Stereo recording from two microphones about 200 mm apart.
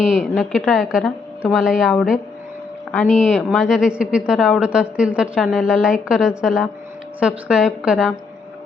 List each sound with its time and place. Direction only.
0.2 s speech: centre (ahead or behind)
3.2 s speech: centre (ahead or behind)